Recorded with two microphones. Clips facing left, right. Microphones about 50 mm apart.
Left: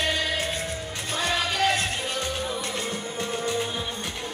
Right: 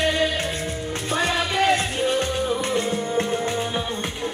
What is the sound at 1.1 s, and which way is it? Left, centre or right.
Music, right.